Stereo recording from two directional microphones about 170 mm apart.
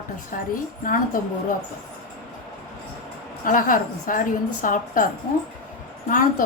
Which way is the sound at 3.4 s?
55° left (ahead or behind).